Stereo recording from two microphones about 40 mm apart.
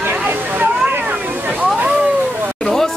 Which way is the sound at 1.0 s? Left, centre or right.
Right.